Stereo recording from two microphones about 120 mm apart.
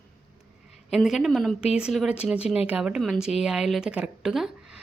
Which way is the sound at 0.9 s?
Centre (ahead or behind).